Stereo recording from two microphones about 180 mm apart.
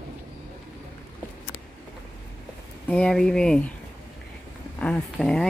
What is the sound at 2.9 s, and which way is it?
Speech, 5° left (ahead or behind).